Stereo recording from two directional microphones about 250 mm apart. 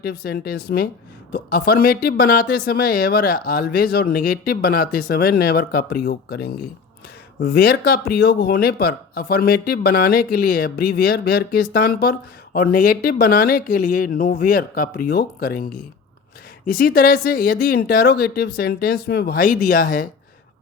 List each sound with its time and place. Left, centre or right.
0.0 s speech: left